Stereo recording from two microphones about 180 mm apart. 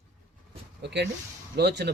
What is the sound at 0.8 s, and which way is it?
Speech, 70° right (ahead or behind).